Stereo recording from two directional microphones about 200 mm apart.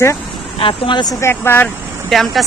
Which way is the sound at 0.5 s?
25° left (ahead or behind).